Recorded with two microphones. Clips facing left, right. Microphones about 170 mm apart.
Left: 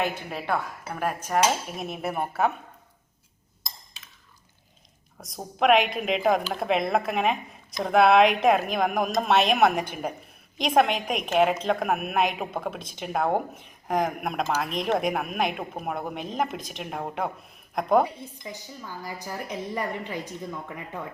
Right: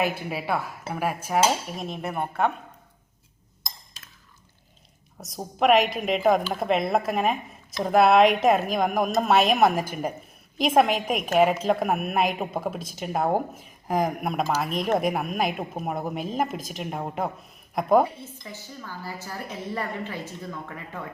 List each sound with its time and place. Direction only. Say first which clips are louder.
0.0 s speech: right 2 dB; 10° right (ahead or behind)
5.1 s speech: right 2 dB; 5° right (ahead or behind)
18.0 s a woman's voice: right 1 dB; 15° left (ahead or behind)